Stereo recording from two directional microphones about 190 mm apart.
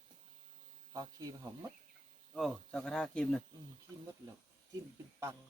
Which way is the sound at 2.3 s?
Centre (ahead or behind).